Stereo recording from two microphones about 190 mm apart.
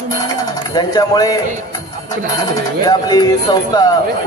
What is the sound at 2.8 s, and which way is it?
Music, 20° left (ahead or behind).